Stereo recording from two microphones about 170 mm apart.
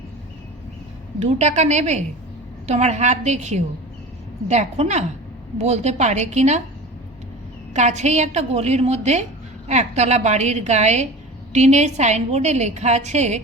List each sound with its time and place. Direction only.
1.2 s a woman's voice: 40° right (ahead or behind)
7.7 s a woman's voice: 45° right (ahead or behind)